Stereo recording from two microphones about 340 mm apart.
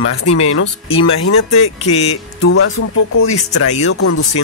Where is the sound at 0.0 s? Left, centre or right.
Left.